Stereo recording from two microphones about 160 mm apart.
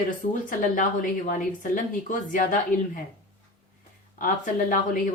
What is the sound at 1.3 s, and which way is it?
A woman's voice, 55° left (ahead or behind).